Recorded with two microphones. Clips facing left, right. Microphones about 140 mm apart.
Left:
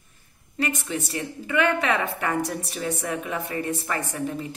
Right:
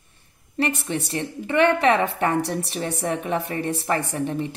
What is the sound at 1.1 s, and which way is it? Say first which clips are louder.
A woman's voice: right 3 dB; 30° right (ahead or behind).